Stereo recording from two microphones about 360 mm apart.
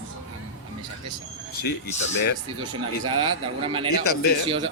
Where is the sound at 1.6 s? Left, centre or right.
Left.